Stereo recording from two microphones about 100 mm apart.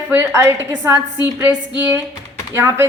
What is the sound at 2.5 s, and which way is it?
Speech, 25° right (ahead or behind).